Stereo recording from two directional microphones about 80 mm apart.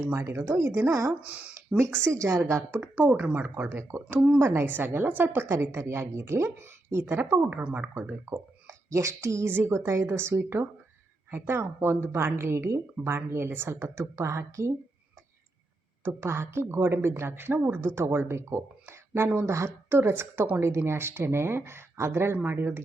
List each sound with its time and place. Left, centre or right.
0.0 s a woman's voice: right
1.2 s speech: centre
2.0 s a woman's voice: right
3.1 s speech: centre
3.5 s a woman's voice: right
7.6 s speech: centre
7.9 s a woman's voice: right
16.0 s a woman's voice: right